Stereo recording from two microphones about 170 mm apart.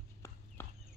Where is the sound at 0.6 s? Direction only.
10° left (ahead or behind).